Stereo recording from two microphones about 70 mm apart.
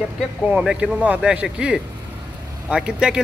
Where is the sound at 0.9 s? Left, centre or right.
Centre.